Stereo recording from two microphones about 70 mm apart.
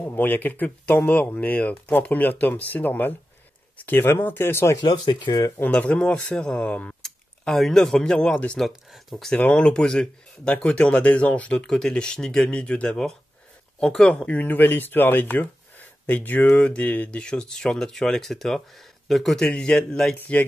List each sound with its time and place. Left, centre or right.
0.1 s speech: left
4.8 s speech: left
5.7 s speech: centre
7.0 s speech: centre
9.4 s speech: centre
20.2 s speech: left